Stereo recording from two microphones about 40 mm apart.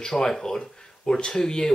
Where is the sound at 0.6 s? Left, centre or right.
Left.